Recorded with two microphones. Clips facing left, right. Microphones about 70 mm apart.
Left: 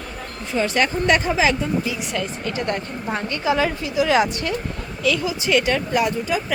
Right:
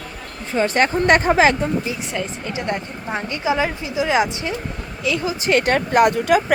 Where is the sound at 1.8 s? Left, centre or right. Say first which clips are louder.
Even; right.